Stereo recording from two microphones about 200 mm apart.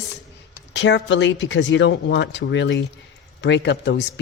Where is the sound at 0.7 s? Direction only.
65° left (ahead or behind).